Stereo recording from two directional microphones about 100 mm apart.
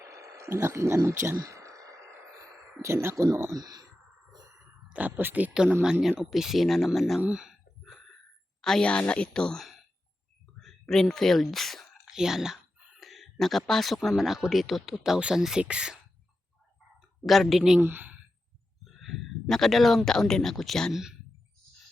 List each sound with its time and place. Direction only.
0.0 s a sound: 30° right (ahead or behind)
2.5 s a sound: 5° right (ahead or behind)
2.8 s speech: 25° right (ahead or behind)
4.6 s speech: 15° right (ahead or behind); by 7.2 s centre (ahead or behind)
7.2 s a sound: 10° right (ahead or behind)
8.6 s a woman's voice: 10° left (ahead or behind); by 16.0 s 10° right (ahead or behind)
17.2 s speech: centre (ahead or behind)
17.7 s speech: 20° right (ahead or behind)
18.9 s speech: centre (ahead or behind)